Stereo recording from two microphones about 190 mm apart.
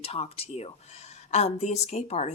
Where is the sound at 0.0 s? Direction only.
30° left (ahead or behind).